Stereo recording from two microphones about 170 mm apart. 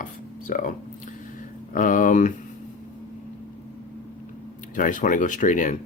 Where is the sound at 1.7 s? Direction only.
50° left (ahead or behind).